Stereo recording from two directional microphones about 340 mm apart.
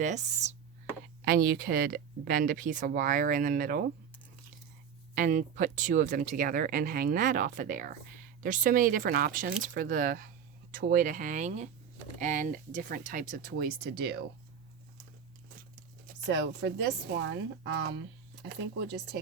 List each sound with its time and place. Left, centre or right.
0.0 s speech: right
5.1 s speech: right
16.2 s speech: right